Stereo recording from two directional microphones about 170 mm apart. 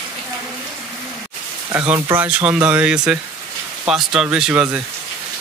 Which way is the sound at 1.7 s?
10° right (ahead or behind).